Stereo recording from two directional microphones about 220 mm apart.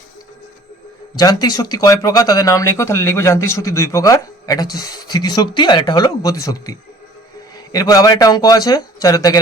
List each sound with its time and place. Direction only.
1.1 s speech: 15° left (ahead or behind)